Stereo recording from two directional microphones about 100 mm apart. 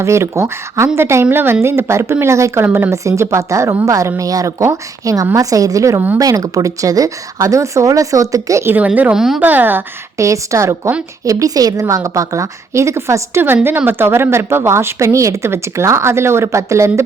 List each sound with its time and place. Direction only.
0.0 s a woman's voice: 30° right (ahead or behind)
2.9 s speech: 30° right (ahead or behind)
9.1 s a woman's voice: 5° right (ahead or behind)
9.4 s speech: 15° right (ahead or behind)
10.2 s a woman's voice: 30° right (ahead or behind)